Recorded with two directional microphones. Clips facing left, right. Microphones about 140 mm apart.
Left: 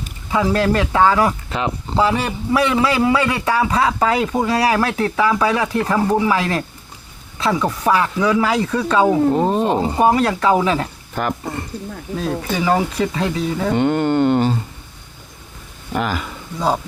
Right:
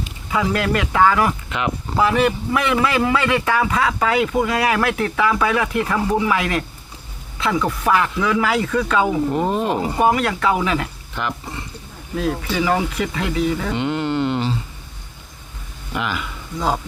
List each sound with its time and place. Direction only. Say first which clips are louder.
0.3 s speech: left 3 dB; 30° left (ahead or behind)
7.9 s speech: left 3 dB; 30° left (ahead or behind); by 11.6 s 50° left (ahead or behind)
12.5 s speech: left 3 dB; 25° left (ahead or behind)
13.7 s speech: left 5 dB; 45° left (ahead or behind)
15.9 s speech: left 3 dB; 40° left (ahead or behind)